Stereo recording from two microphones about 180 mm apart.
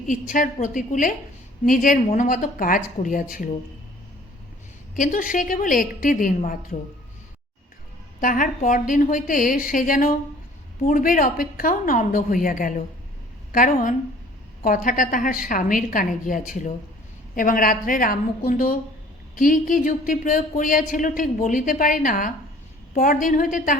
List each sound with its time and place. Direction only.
0.1 s speech: 45° left (ahead or behind)
4.9 s speech: 45° left (ahead or behind)
8.2 s speech: 50° left (ahead or behind)